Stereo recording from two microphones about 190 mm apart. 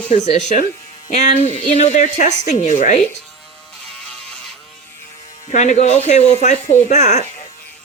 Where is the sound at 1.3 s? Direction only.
40° right (ahead or behind).